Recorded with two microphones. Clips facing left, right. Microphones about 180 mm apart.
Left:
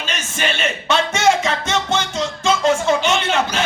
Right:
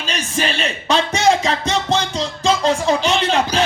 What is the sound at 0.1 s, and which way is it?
Music, 35° right (ahead or behind).